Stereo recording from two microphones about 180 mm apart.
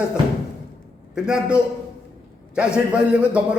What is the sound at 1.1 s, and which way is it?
A man's voice, 5° right (ahead or behind).